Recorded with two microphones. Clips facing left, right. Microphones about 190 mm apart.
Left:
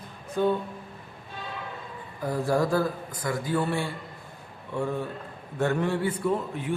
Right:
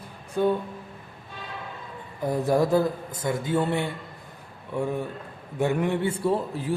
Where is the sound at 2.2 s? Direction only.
20° right (ahead or behind).